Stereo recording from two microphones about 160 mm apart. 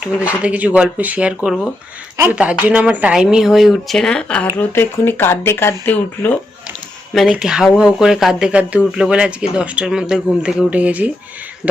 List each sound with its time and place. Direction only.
0.0 s speech: 10° right (ahead or behind); by 6.3 s 10° left (ahead or behind)
7.1 s speech: centre (ahead or behind)
11.6 s speech: 15° left (ahead or behind)